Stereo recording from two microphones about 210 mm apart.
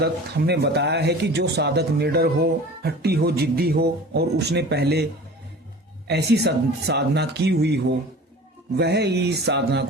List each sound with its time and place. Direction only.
0.0 s speech: 50° right (ahead or behind)
6.1 s speech: 50° right (ahead or behind)